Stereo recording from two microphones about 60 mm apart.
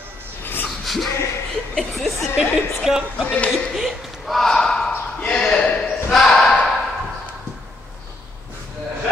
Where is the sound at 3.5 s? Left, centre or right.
Centre.